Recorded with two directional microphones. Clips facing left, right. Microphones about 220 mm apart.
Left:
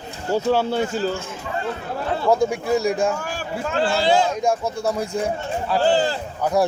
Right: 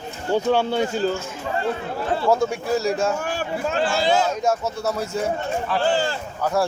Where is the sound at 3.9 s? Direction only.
30° left (ahead or behind).